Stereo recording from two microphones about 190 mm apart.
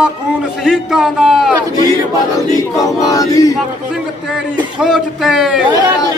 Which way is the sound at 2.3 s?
20° left (ahead or behind).